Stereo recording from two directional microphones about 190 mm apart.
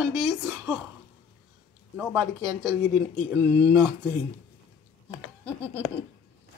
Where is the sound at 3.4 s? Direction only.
10° left (ahead or behind).